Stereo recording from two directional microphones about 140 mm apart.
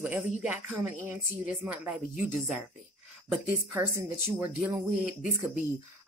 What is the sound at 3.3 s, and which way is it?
Speech, 10° right (ahead or behind).